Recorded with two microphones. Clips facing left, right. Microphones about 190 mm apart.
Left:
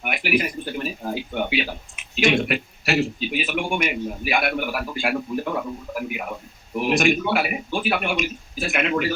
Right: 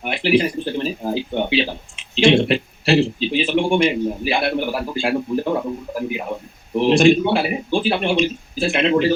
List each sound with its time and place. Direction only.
0.0 s speech: 30° right (ahead or behind)